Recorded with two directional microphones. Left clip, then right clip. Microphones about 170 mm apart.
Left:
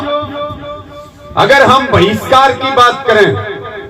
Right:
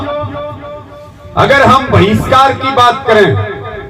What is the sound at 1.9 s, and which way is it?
Speech, 30° left (ahead or behind).